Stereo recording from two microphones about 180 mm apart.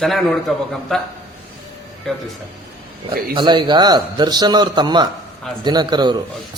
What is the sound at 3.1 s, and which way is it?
A man's voice, 25° right (ahead or behind).